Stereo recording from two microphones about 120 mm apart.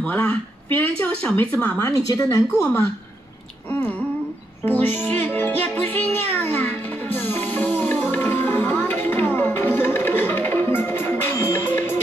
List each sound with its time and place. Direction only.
0.0 s speech: 10° left (ahead or behind)
1.9 s speech: 30° left (ahead or behind)
4.6 s speech: 15° left (ahead or behind)
6.3 s music: 15° left (ahead or behind)